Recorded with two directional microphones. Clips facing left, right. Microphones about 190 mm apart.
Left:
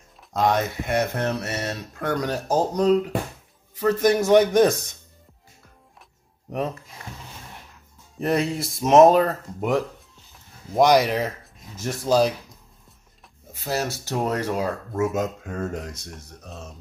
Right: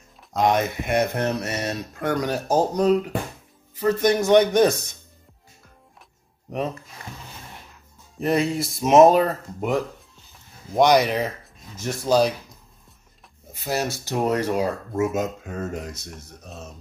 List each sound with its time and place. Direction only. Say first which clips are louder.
0.5 s speech: right 2 dB; 15° right (ahead or behind)
3.8 s speech: even; 5° left (ahead or behind)
8.2 s speech: right 1 dB; centre (ahead or behind)
13.7 s speech: right 1 dB; 15° right (ahead or behind)
14.7 s speech: right 1 dB; 5° right (ahead or behind)